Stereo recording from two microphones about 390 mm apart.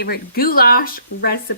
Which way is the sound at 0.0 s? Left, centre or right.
Left.